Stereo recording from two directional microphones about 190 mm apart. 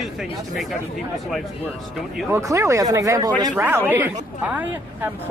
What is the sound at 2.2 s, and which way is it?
Speech, 15° right (ahead or behind).